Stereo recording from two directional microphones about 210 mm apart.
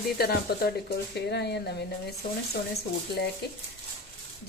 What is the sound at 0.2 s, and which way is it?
Speech, 45° left (ahead or behind).